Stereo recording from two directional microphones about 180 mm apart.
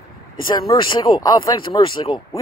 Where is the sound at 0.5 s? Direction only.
25° left (ahead or behind).